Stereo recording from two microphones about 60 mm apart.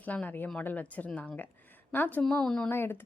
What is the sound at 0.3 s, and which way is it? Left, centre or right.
A woman's voice, left.